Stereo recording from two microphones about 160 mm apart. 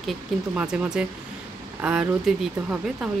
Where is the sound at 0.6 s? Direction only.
5° right (ahead or behind).